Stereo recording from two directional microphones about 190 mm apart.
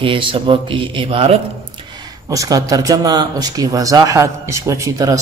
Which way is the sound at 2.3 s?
20° right (ahead or behind).